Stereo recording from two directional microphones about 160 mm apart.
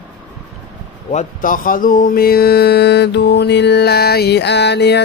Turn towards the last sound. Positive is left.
turn(degrees=90)